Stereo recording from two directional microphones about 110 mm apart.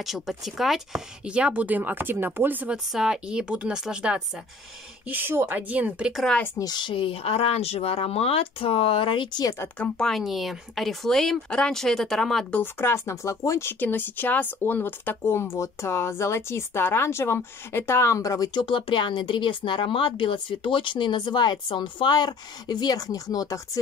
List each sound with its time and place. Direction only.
0.0 s speech: centre (ahead or behind)
2.9 s speech: 5° right (ahead or behind)
6.6 s speech: 45° left (ahead or behind)
9.8 s speech: 5° left (ahead or behind)
12.7 s speech: 25° left (ahead or behind)